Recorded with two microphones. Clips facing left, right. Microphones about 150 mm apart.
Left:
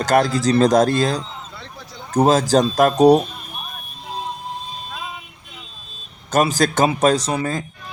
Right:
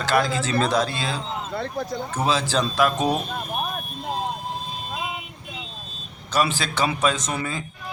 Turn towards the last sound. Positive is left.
turn(degrees=35)  # may be behind; listen again after turning